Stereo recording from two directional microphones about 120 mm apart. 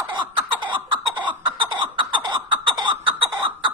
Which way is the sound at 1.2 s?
45° right (ahead or behind).